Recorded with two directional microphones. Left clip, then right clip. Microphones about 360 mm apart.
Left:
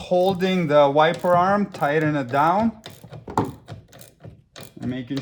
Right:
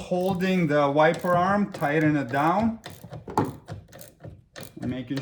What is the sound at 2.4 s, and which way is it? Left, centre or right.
Typewriter, centre.